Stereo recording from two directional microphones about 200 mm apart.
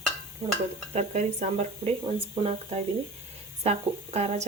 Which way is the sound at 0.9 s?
35° right (ahead or behind).